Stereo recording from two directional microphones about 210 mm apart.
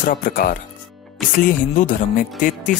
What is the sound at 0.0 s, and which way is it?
Speech, 40° left (ahead or behind).